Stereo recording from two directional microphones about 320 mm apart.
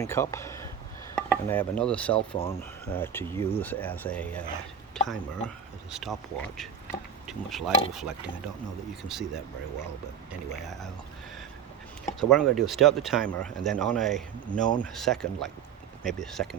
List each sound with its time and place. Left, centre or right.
0.0 s speech: centre
1.1 s chopping: centre
2.1 s speech: centre
10.5 s speech: centre
12.3 s speech: centre